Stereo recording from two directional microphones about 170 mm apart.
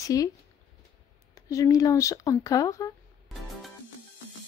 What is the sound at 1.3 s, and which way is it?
Speech, 20° left (ahead or behind).